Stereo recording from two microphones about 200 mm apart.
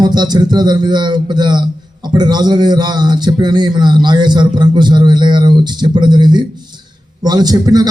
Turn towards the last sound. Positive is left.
turn(degrees=-20)  # may be behind; listen again after turning